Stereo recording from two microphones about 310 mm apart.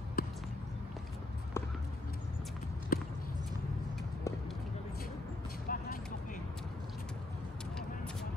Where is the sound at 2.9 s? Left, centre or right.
Left.